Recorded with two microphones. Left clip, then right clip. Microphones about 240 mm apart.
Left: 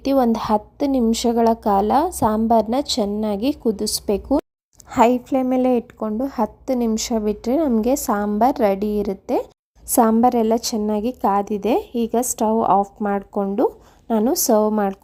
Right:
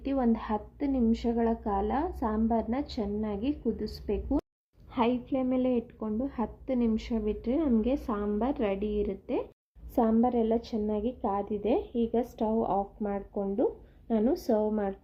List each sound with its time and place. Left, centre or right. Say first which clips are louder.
0.0 s speech: left 12 dB; left